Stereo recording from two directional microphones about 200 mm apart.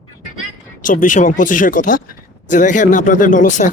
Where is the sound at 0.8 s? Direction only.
40° left (ahead or behind).